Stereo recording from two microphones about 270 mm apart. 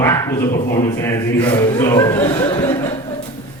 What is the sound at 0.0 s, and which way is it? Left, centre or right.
Bow-wow, centre.